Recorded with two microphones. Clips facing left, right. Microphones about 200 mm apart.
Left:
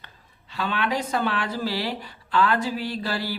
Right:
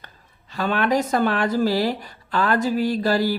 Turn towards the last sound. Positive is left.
turn(degrees=-45)  # may be behind; listen again after turning